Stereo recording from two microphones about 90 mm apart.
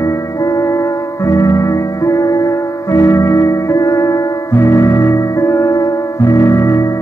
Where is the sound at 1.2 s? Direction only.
35° left (ahead or behind).